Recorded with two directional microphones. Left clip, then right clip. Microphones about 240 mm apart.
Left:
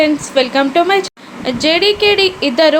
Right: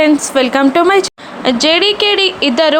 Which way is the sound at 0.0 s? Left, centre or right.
Right.